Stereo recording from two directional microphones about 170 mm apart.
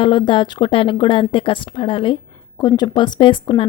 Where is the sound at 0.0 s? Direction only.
30° left (ahead or behind).